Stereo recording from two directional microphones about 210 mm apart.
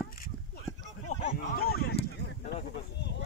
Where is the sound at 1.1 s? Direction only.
45° left (ahead or behind).